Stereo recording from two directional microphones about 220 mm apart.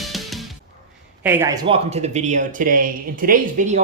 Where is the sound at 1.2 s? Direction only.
10° right (ahead or behind).